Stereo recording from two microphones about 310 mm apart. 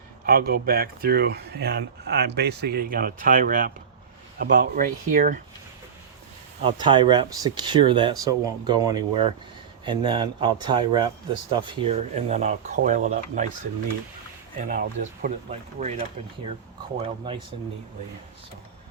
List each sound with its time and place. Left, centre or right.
0.3 s speech: right
6.7 s speech: centre
14.6 s speech: right